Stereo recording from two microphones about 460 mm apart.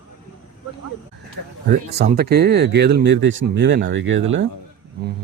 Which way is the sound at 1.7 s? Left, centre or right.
Centre.